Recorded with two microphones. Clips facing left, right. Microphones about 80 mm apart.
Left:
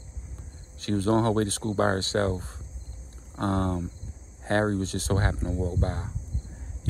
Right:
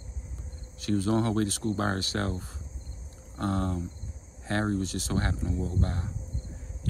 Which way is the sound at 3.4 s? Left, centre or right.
Left.